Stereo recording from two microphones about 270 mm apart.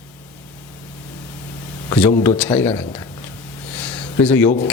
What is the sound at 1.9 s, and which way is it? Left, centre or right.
Speech, centre.